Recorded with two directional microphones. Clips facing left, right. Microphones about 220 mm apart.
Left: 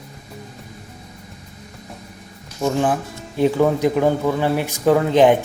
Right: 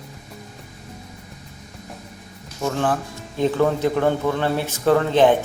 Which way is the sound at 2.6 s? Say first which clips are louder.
Left 3 dB; 15° left (ahead or behind).